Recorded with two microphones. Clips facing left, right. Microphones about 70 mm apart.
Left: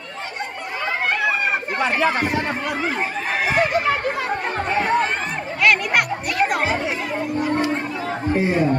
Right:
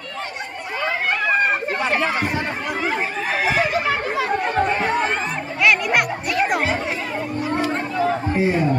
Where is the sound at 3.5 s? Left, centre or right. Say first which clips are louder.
Left 1 dB; centre.